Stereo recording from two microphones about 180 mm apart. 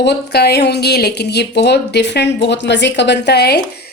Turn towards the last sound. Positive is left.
turn(degrees=60)  # may be behind; listen again after turning